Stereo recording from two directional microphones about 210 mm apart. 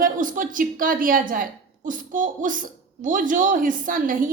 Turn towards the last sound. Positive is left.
turn(degrees=-40)  # may be behind; listen again after turning